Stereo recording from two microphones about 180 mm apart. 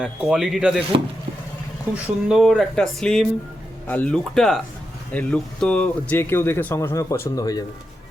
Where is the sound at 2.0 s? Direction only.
Centre (ahead or behind); by 7.7 s 20° left (ahead or behind).